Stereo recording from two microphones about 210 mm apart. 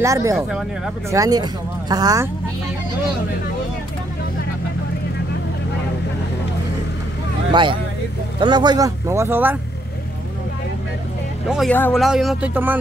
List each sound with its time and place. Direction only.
0.0 s speech: 15° right (ahead or behind)
8.4 s speech: 20° right (ahead or behind)
11.5 s speech: 5° left (ahead or behind)